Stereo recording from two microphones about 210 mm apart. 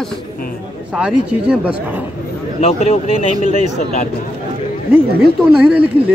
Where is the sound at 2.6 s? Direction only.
30° left (ahead or behind).